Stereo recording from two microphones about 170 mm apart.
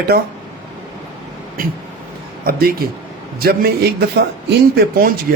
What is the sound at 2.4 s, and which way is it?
A man's voice, 60° right (ahead or behind).